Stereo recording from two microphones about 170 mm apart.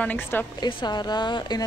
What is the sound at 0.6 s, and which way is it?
A woman's voice, 25° left (ahead or behind).